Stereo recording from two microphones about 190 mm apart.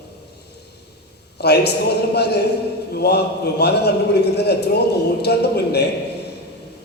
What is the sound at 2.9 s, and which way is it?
A man's voice, 60° left (ahead or behind).